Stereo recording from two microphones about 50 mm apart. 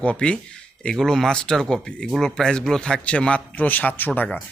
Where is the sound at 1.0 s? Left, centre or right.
Centre.